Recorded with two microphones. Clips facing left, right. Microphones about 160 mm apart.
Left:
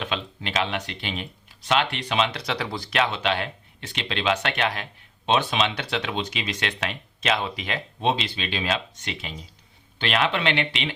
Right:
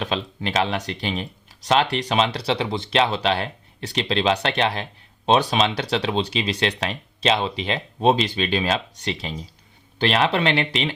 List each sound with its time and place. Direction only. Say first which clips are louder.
0.0 s speech: right 4 dB; 35° right (ahead or behind)
8.0 s speech: right 6 dB; 45° right (ahead or behind)